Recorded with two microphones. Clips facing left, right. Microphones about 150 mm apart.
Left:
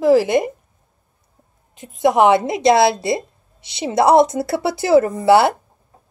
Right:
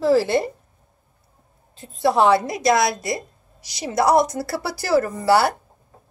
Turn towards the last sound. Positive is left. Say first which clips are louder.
# left 5 dB
turn(degrees=20)  # may be behind; listen again after turning